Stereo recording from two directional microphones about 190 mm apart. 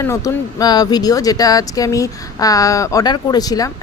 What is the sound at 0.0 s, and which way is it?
Speech, 15° left (ahead or behind).